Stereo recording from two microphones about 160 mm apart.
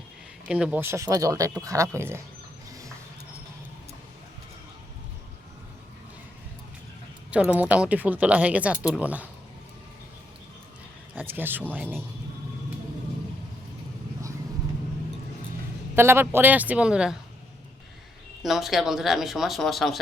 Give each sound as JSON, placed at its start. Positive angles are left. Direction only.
{"t": 0.4, "sound": "speech", "side_deg": -5}
{"t": 7.3, "sound": "speech", "side_deg": -10}
{"t": 11.1, "sound": "speech", "side_deg": -10}
{"t": 16.0, "sound": "speech", "side_deg": -15}
{"t": 18.4, "sound": "speech", "side_deg": 0}